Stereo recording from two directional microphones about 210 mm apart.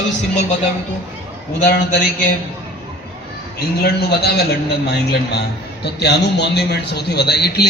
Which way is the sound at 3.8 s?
50° left (ahead or behind).